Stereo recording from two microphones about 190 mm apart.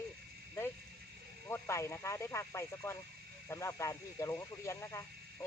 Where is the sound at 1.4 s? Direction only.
15° left (ahead or behind).